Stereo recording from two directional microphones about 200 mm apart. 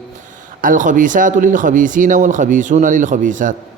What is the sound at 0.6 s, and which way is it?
A man's voice, 40° right (ahead or behind).